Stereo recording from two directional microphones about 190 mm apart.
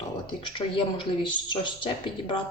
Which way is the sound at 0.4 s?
25° left (ahead or behind).